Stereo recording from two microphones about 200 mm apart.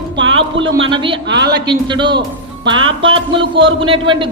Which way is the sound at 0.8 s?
25° right (ahead or behind).